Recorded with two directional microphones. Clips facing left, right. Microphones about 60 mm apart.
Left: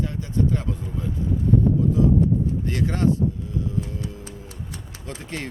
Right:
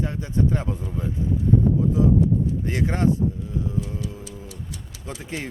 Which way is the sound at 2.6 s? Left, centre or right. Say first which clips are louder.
Even; right.